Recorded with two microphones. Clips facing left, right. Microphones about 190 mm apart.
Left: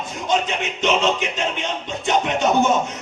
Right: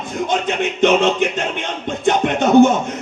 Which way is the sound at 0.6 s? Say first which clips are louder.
Right 6 dB; 55° right (ahead or behind).